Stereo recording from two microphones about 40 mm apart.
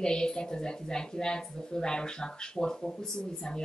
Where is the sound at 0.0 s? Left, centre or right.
Centre.